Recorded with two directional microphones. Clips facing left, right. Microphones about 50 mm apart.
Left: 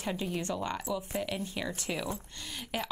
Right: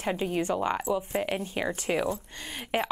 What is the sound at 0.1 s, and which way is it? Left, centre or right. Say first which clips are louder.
Speech: right 7 dB; right.